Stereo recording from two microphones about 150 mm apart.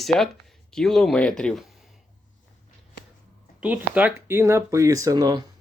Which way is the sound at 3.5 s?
10° right (ahead or behind).